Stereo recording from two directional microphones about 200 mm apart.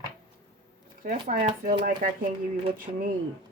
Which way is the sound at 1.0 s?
45° right (ahead or behind).